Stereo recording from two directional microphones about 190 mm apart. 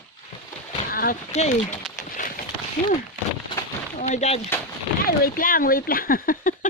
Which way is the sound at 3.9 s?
35° left (ahead or behind).